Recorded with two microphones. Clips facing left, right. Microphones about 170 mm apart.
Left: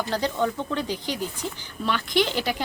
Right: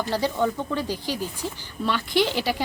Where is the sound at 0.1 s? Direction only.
5° right (ahead or behind).